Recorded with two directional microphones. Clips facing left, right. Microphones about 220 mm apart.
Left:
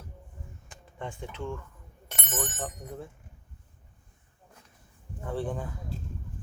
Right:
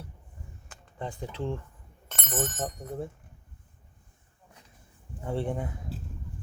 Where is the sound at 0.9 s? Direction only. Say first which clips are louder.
Right 2 dB; 35° right (ahead or behind).